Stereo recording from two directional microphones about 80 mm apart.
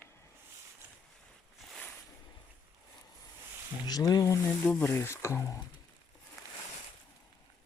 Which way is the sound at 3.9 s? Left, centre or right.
Left.